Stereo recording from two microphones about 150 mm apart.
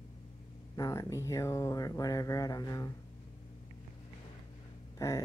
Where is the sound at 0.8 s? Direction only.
20° left (ahead or behind).